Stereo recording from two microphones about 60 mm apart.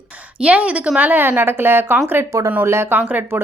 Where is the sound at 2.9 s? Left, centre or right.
Right.